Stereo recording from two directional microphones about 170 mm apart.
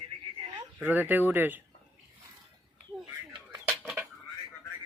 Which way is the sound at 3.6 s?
5° right (ahead or behind).